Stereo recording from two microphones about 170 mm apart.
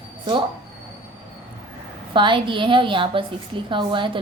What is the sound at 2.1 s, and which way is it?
A woman's voice, 30° right (ahead or behind).